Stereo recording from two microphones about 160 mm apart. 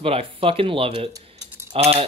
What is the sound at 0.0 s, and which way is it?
Speech, 35° right (ahead or behind).